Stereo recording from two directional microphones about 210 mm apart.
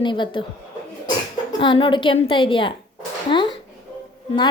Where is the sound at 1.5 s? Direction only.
25° left (ahead or behind).